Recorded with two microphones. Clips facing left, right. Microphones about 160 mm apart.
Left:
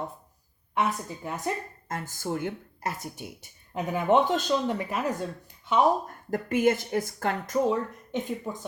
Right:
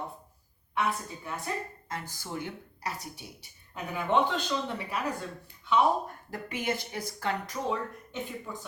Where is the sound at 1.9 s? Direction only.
50° left (ahead or behind).